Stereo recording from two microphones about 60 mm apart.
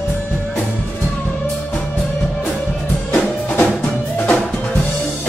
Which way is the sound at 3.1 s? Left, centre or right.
Left.